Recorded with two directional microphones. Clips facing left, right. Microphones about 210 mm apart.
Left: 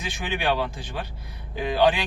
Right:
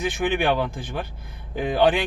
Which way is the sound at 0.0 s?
55° right (ahead or behind).